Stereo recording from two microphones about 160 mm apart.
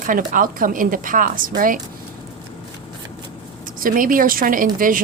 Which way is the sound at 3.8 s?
60° right (ahead or behind).